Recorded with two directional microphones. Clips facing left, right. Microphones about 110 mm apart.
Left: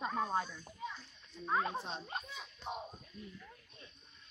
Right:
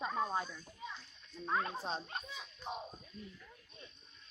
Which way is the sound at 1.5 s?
10° left (ahead or behind).